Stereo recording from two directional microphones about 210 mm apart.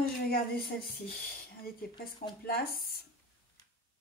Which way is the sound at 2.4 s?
45° left (ahead or behind).